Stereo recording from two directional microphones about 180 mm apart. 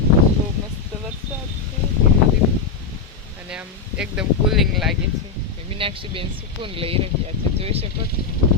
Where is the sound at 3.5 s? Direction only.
5° right (ahead or behind).